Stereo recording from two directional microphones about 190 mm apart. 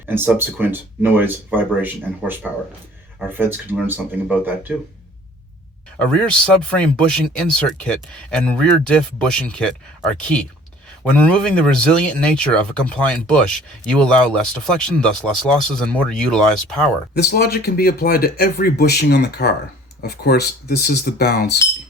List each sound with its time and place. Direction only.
0.0 s speech: 10° right (ahead or behind)
6.0 s speech: 5° left (ahead or behind)
17.2 s speech: 55° left (ahead or behind)